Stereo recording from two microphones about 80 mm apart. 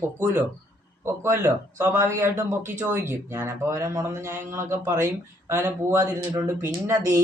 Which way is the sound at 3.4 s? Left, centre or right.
Right.